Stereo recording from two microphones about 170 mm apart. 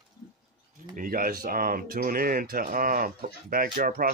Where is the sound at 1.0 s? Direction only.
55° right (ahead or behind).